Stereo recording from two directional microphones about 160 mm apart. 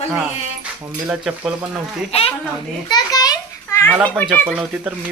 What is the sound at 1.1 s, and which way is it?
Speech, 5° right (ahead or behind).